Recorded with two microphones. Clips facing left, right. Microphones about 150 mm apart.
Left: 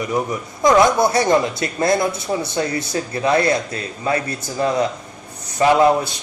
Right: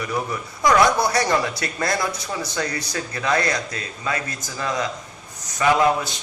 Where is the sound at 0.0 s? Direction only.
20° left (ahead or behind).